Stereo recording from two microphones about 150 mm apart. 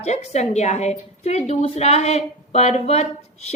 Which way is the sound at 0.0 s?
50° left (ahead or behind).